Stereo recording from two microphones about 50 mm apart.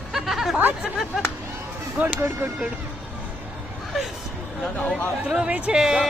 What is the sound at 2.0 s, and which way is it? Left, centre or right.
Speech, right.